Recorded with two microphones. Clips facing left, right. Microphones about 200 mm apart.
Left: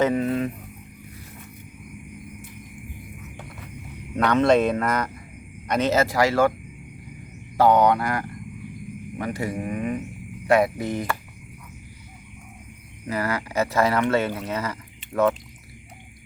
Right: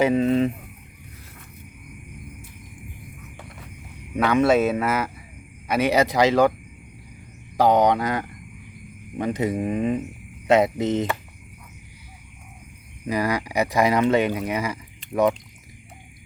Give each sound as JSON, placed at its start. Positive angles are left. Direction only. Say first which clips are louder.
{"t": 0.1, "sound": "speech", "louder": "right 4 dB", "side_deg": -25}
{"t": 4.1, "sound": "speech", "louder": "even", "side_deg": -10}
{"t": 7.5, "sound": "speech", "louder": "even", "side_deg": -15}
{"t": 13.1, "sound": "speech", "louder": "right 3 dB", "side_deg": -15}